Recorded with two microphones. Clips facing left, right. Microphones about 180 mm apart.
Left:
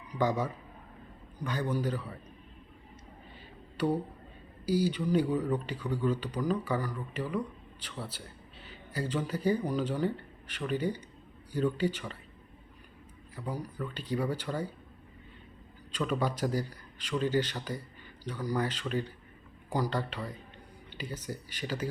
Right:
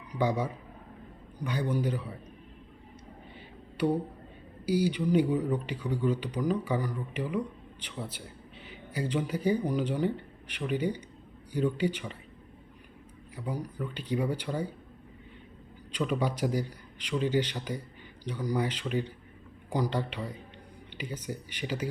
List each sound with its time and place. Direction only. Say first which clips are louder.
0.2 s speech: right 1 dB; 15° right (ahead or behind)
4.6 s speech: right 2 dB; 15° right (ahead or behind)
13.3 s speech: right 2 dB; 15° right (ahead or behind)
15.9 s speech: right 1 dB; 15° right (ahead or behind)